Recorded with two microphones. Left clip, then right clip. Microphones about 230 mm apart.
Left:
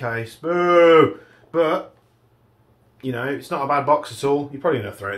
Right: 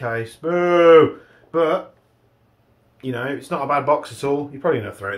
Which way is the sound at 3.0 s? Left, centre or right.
Centre.